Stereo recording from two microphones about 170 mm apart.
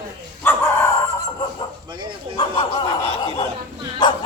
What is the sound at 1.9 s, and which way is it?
Speech, 25° right (ahead or behind).